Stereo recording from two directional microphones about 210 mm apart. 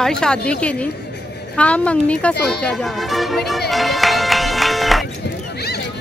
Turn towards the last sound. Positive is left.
turn(degrees=0)  # may be behind; listen again after turning